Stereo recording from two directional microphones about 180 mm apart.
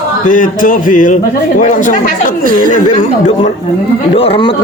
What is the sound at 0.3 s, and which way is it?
A man's voice, 45° left (ahead or behind).